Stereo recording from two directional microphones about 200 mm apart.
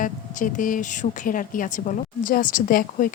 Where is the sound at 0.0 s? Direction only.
40° left (ahead or behind).